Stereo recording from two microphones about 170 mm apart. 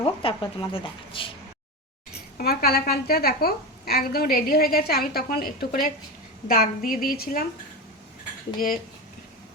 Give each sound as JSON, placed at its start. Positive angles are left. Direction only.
{"t": 0.0, "sound": "speech", "side_deg": 30}
{"t": 2.4, "sound": "a woman's voice", "side_deg": 70}
{"t": 8.5, "sound": "a woman's voice", "side_deg": 55}